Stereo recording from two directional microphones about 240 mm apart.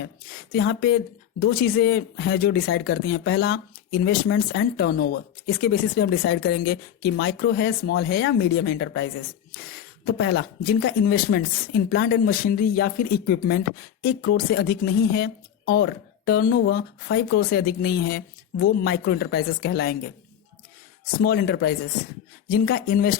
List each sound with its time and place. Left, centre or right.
0.0 s speech: left
21.0 s speech: left